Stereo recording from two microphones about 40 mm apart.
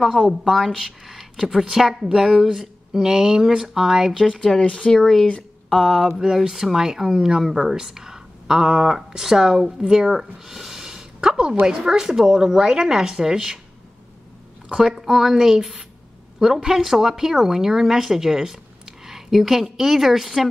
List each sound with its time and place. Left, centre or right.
0.4 s a woman's voice: centre
2.0 s speech: centre
4.4 s speech: centre
4.6 s speech: left
4.9 s speech: centre
5.7 s speech: centre
14.7 s a woman's voice: centre